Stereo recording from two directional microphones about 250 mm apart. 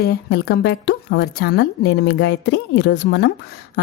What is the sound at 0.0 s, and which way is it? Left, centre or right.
A woman's voice, left.